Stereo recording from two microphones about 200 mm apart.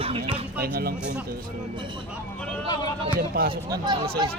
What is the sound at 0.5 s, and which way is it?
Speech, 50° right (ahead or behind).